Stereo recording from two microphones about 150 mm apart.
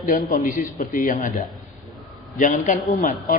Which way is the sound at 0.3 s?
65° left (ahead or behind).